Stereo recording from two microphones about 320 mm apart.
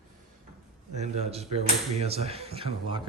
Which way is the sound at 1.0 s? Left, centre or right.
Centre.